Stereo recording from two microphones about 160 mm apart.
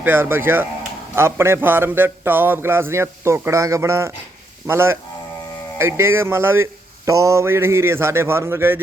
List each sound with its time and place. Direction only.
0.0 s speech: 15° right (ahead or behind)